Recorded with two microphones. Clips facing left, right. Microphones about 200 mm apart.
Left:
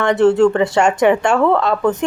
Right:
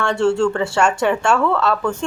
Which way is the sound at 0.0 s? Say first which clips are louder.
Left 5 dB; 20° left (ahead or behind).